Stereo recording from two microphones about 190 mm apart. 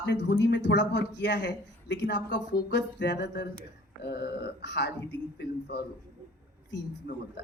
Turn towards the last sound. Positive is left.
turn(degrees=60)  # may be behind; listen again after turning